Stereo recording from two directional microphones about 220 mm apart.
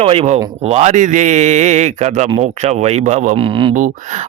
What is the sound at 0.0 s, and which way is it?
A man's voice, 25° right (ahead or behind).